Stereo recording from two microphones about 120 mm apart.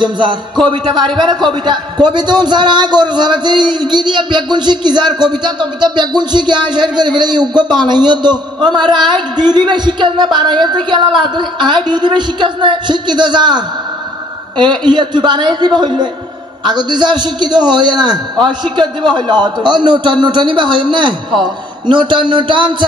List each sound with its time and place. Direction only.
0.7 s speech: 40° right (ahead or behind)